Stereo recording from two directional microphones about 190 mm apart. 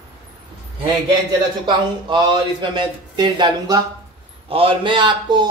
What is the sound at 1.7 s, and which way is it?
A man's voice, 25° right (ahead or behind).